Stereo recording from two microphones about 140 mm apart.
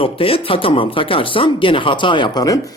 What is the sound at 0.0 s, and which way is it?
Speech, 40° left (ahead or behind).